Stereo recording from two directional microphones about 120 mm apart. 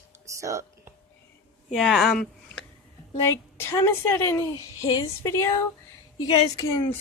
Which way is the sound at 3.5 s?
20° left (ahead or behind).